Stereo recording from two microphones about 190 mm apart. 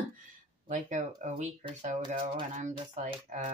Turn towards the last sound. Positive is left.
turn(degrees=-40)  # may be behind; listen again after turning